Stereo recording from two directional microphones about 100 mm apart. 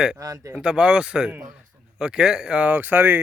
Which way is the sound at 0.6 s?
10° right (ahead or behind).